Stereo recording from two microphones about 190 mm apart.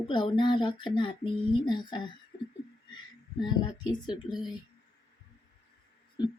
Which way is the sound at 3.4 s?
25° left (ahead or behind).